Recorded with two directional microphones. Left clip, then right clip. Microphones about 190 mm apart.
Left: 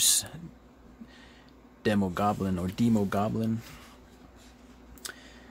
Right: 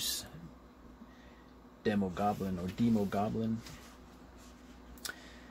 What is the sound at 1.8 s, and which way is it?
Speech, 30° left (ahead or behind).